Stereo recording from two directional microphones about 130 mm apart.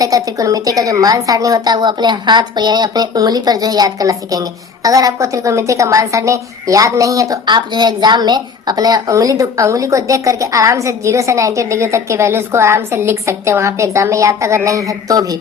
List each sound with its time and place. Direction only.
0.0 s a woman's voice: 25° right (ahead or behind)